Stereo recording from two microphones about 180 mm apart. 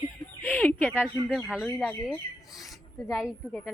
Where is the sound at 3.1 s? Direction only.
5° right (ahead or behind).